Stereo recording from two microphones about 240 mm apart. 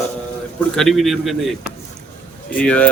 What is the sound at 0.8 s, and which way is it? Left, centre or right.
Speech, centre.